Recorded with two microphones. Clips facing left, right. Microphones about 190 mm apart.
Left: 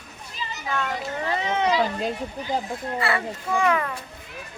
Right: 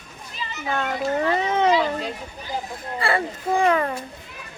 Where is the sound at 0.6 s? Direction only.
35° right (ahead or behind).